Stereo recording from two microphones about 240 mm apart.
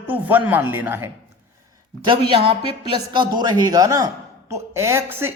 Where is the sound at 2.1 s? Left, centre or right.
Right.